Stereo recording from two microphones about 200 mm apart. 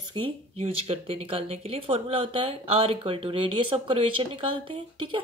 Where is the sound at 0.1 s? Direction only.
30° right (ahead or behind).